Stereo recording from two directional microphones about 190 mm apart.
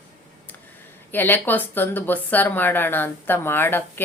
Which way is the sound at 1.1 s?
10° left (ahead or behind).